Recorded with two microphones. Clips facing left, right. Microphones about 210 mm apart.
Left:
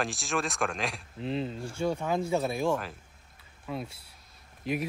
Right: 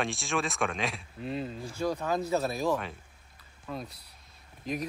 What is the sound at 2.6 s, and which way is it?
Speech, centre (ahead or behind).